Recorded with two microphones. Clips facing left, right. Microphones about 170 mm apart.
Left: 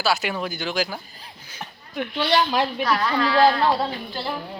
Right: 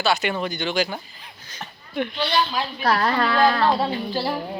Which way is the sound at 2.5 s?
70° left (ahead or behind).